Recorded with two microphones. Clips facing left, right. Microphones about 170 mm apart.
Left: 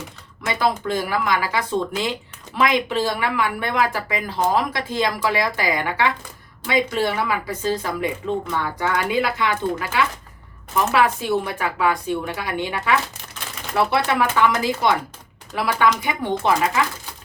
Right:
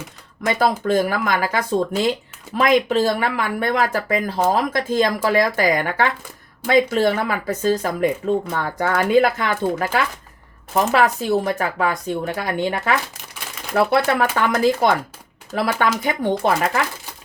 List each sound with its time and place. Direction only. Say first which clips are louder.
0.9 s speech: right 3 dB; 45° right (ahead or behind)